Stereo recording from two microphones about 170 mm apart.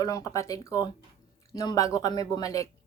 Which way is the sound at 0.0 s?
20° left (ahead or behind).